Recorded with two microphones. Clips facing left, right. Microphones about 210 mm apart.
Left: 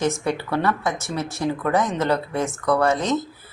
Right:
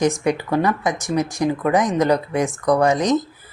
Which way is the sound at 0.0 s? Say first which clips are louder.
Right 4 dB; 15° right (ahead or behind).